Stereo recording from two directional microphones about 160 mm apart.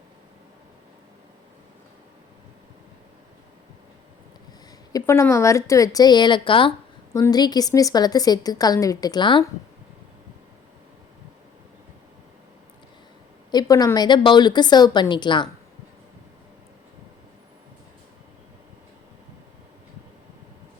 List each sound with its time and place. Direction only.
4.9 s a woman's voice: 20° left (ahead or behind)
7.1 s a woman's voice: 20° left (ahead or behind)
13.5 s a woman's voice: 25° left (ahead or behind)